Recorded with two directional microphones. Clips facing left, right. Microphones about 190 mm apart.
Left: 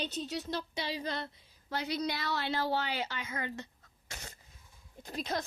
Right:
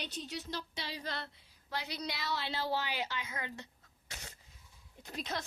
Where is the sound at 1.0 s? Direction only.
15° left (ahead or behind).